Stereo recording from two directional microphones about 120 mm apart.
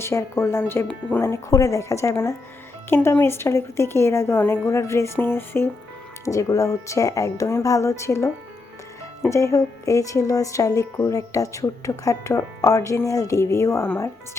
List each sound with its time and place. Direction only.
0.0 s speech: 25° left (ahead or behind)